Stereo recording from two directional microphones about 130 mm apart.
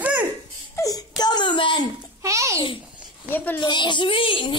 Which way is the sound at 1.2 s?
35° left (ahead or behind).